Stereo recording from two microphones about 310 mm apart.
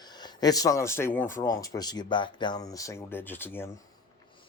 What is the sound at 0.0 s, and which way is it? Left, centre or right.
Speech, centre.